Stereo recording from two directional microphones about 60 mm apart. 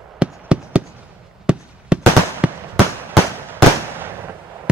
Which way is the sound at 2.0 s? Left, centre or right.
Right.